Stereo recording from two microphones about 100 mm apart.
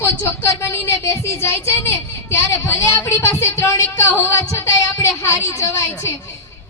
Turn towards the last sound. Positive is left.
turn(degrees=30)  # may be behind; listen again after turning